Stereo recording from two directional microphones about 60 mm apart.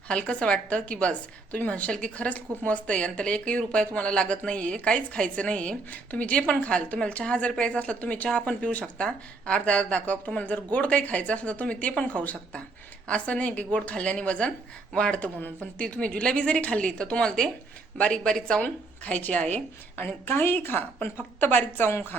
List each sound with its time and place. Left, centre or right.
0.1 s speech: centre
18.6 s speech: left
20.0 s a woman's voice: left